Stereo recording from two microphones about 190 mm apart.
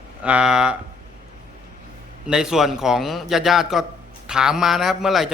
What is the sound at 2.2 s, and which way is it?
Speech, 5° right (ahead or behind).